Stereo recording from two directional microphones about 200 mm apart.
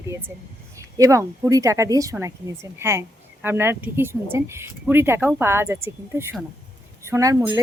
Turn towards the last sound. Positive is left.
turn(degrees=-15)  # may be behind; listen again after turning